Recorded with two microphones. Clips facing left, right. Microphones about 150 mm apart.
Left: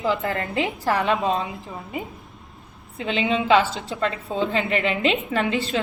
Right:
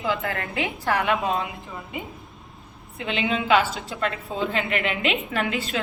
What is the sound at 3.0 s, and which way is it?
A woman's voice, 30° left (ahead or behind).